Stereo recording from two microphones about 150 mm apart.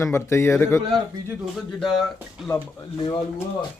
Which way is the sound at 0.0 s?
20° left (ahead or behind).